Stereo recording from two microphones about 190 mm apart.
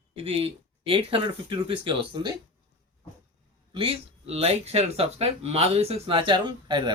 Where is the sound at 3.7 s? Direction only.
30° right (ahead or behind).